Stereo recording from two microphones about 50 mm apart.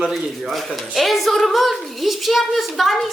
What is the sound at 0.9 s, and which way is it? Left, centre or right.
A woman's voice, centre.